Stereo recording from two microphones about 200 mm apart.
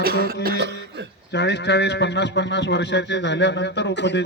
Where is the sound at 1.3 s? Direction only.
60° left (ahead or behind).